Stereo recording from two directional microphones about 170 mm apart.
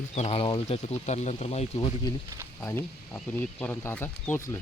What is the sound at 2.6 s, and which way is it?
Speech, 15° left (ahead or behind).